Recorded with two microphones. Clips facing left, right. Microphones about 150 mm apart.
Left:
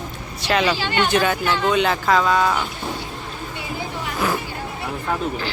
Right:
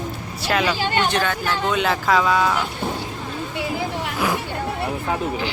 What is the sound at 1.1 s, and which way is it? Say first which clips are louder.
Speech: left 3 dB; 10° left (ahead or behind).